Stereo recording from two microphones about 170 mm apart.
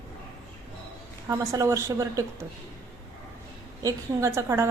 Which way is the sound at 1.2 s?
20° right (ahead or behind).